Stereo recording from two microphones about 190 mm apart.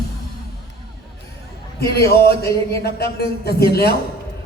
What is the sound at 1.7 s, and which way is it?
A man's voice, 55° left (ahead or behind).